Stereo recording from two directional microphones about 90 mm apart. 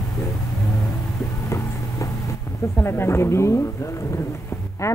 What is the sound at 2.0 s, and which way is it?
Vehicle, 35° left (ahead or behind).